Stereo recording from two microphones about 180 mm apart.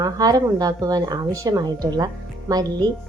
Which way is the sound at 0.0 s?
20° right (ahead or behind).